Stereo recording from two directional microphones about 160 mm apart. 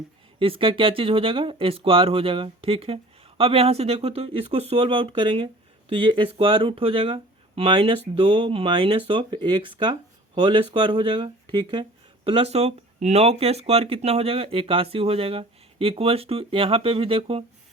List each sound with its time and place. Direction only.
0.3 s speech: 35° right (ahead or behind)